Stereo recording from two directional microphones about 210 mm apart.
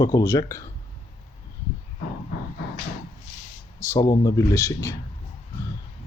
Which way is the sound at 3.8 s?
15° left (ahead or behind).